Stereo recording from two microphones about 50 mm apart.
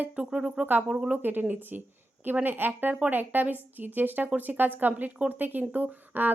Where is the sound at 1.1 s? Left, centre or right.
Right.